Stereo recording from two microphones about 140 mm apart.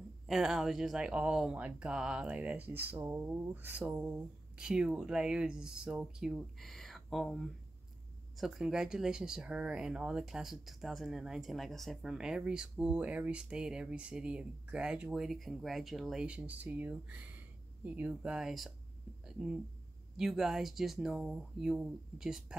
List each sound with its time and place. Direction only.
0.3 s speech: centre (ahead or behind)